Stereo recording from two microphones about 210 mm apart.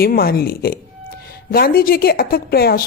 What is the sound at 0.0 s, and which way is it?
A woman's voice, 45° left (ahead or behind).